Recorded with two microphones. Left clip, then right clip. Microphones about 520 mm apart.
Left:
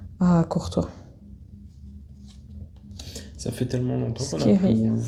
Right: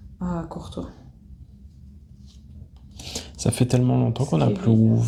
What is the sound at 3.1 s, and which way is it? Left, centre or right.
Speech, right.